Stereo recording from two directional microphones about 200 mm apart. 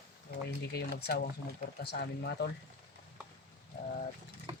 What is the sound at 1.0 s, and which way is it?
Speech, 55° left (ahead or behind).